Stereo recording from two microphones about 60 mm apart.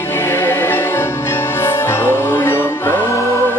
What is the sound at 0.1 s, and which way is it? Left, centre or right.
Music, left.